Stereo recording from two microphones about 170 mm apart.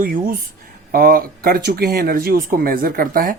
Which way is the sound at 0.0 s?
55° right (ahead or behind).